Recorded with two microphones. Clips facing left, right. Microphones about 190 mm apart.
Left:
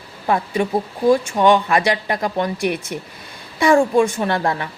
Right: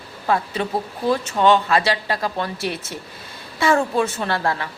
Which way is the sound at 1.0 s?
15° left (ahead or behind).